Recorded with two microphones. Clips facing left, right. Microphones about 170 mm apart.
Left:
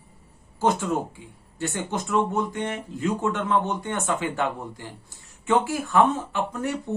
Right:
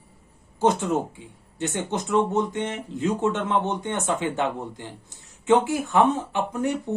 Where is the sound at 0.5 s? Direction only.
20° right (ahead or behind).